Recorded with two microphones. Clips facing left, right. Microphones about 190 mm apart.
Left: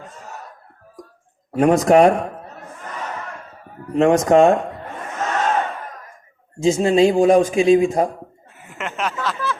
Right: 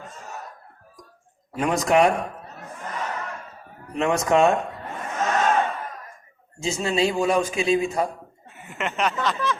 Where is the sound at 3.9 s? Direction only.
50° left (ahead or behind).